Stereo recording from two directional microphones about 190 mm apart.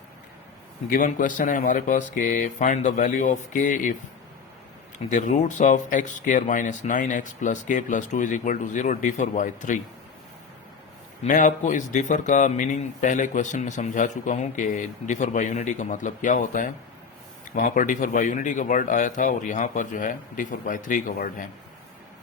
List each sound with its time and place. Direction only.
0.9 s speech: 45° left (ahead or behind)
5.0 s a man's voice: 40° left (ahead or behind)
11.2 s a man's voice: 45° left (ahead or behind)